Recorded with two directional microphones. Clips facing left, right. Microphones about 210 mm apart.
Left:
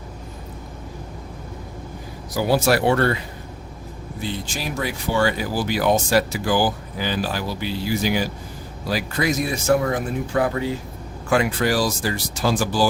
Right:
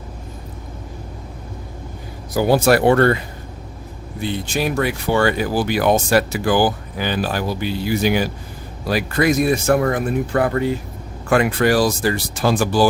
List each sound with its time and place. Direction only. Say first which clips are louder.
2.3 s speech: right 4 dB; 55° right (ahead or behind)
4.2 s speech: right 7 dB; 60° right (ahead or behind)